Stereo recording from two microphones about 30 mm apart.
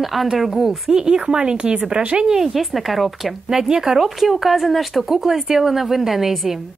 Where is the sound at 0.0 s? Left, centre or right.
Centre.